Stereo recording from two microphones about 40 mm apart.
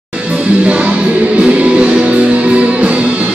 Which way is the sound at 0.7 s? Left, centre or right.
Right.